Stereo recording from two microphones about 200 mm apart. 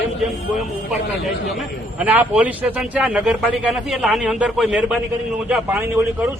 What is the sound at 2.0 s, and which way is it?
A man's voice, 5° right (ahead or behind).